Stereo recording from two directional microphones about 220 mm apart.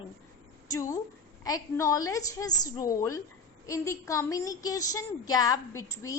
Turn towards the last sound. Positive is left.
turn(degrees=15)  # may be behind; listen again after turning